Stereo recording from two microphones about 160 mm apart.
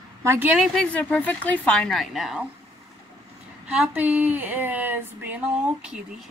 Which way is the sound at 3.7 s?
10° right (ahead or behind).